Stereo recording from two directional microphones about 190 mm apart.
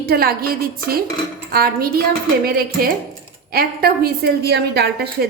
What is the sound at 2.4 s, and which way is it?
A woman's voice, 50° right (ahead or behind).